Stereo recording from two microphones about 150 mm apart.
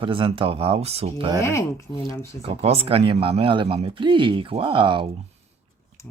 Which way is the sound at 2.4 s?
40° right (ahead or behind).